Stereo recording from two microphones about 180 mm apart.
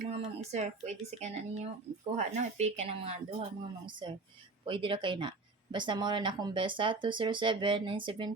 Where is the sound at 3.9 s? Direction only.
25° right (ahead or behind).